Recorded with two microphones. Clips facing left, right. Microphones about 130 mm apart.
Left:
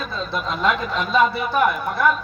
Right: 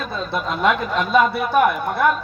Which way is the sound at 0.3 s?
60° right (ahead or behind).